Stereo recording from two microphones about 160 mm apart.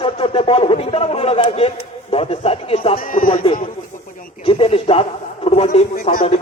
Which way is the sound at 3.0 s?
60° left (ahead or behind).